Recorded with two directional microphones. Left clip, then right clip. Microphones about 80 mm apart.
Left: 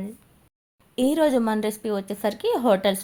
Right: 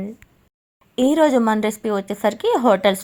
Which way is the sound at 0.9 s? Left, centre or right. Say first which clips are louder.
Right 5 dB; right.